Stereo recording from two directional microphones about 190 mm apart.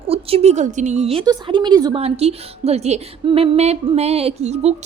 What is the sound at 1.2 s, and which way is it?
Speech, 25° right (ahead or behind).